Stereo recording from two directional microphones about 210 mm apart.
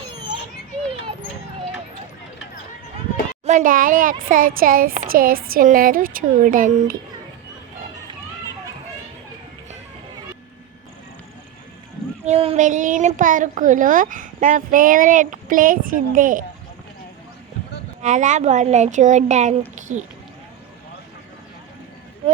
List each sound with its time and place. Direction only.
3.4 s a child's voice: 35° right (ahead or behind)
12.2 s a child's voice: 30° right (ahead or behind)
18.0 s a child's voice: 35° right (ahead or behind)